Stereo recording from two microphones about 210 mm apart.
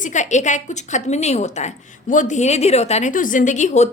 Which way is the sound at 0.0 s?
35° left (ahead or behind).